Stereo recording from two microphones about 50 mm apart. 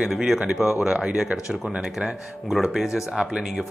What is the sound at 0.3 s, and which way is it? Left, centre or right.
Speech, centre.